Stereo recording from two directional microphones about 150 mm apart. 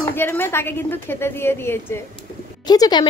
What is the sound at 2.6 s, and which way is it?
Speech, 25° left (ahead or behind).